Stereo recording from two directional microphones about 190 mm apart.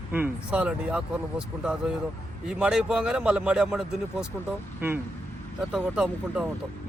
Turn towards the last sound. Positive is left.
turn(degrees=-5)  # may be behind; listen again after turning